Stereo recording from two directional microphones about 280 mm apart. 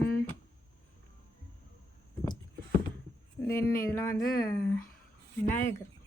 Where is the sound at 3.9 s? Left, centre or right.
Centre.